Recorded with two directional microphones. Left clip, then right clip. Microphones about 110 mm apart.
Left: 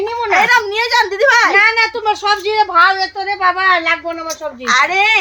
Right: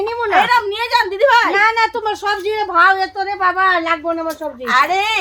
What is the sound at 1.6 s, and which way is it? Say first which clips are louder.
A woman's voice: left 2 dB; 20° right (ahead or behind).